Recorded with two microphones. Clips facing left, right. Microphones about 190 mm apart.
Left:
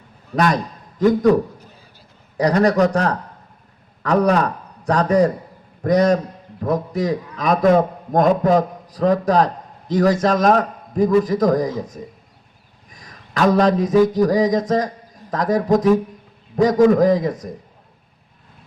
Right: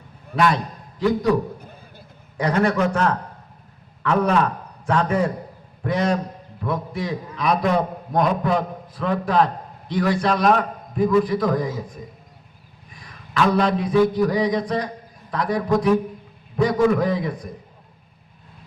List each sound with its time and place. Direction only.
0.3 s a man's voice: 45° left (ahead or behind)
1.5 s a sound: 55° right (ahead or behind)
2.4 s a man's voice: 35° left (ahead or behind)
12.9 s a man's voice: 40° left (ahead or behind)